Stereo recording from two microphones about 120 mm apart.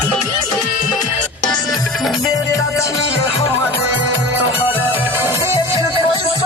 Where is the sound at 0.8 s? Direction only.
90° left.